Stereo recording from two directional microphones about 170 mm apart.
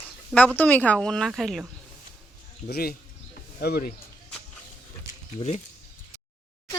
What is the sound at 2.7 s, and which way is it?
Speech, 65° left (ahead or behind).